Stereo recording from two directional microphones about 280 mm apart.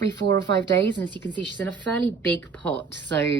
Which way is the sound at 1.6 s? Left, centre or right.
Centre.